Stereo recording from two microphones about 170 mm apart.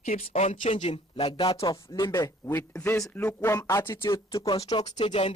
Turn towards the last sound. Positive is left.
turn(degrees=30)  # may be behind; listen again after turning